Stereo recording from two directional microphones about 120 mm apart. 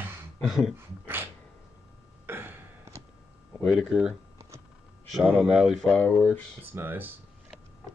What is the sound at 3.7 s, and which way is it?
Speech, 5° right (ahead or behind).